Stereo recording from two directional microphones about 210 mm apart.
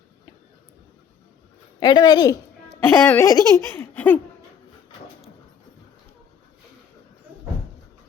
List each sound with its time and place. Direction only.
1.8 s a woman's voice: 20° left (ahead or behind)